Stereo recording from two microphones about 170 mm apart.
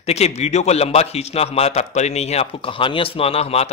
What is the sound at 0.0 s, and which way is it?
A man's voice, 40° left (ahead or behind).